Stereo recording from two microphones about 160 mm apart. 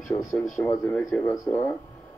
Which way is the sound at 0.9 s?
Centre (ahead or behind).